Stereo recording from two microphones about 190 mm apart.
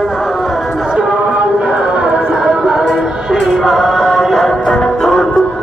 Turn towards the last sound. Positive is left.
turn(degrees=0)  # may be behind; listen again after turning